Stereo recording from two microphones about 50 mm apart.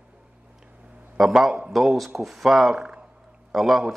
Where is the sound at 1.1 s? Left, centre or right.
Centre.